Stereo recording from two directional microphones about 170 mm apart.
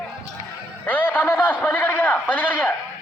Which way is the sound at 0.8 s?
10° left (ahead or behind).